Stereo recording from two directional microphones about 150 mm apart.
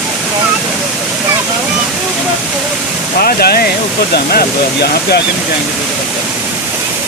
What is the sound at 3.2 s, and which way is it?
Speech, 90° left.